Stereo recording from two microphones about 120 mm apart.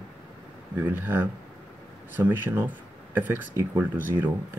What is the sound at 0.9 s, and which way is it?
Speech, 15° right (ahead or behind).